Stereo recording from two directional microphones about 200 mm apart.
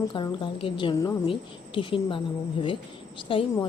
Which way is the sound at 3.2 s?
25° left (ahead or behind).